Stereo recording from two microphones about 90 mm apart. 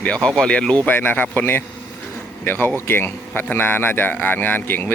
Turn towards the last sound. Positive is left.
turn(degrees=20)  # may be behind; listen again after turning